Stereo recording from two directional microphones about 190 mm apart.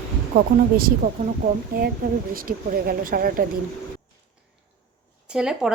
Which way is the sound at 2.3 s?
50° right (ahead or behind).